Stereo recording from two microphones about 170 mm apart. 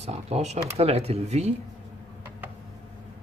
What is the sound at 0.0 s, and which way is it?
Speech, 40° right (ahead or behind).